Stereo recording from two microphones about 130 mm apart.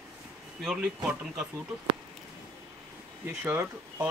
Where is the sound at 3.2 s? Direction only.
15° right (ahead or behind).